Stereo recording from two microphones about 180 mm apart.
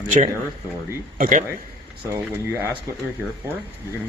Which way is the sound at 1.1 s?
50° right (ahead or behind).